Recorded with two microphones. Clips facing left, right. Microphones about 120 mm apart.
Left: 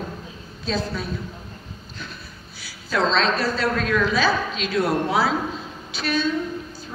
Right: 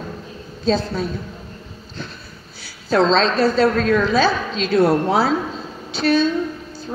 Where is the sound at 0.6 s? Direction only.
30° right (ahead or behind).